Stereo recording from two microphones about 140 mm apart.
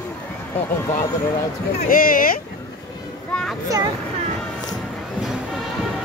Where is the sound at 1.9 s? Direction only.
90° left.